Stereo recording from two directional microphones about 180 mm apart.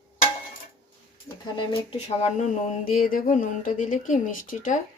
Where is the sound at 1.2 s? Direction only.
25° left (ahead or behind).